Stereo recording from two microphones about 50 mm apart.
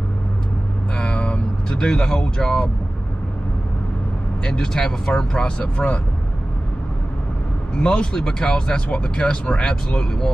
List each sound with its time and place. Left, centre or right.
0.9 s vehicle: left
4.5 s speech: centre
5.6 s speech: left
7.7 s speech: centre